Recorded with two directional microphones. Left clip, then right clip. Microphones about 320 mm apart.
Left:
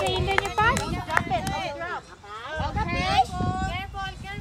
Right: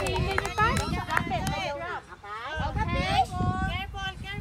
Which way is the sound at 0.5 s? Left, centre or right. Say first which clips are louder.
Left 2 dB; left.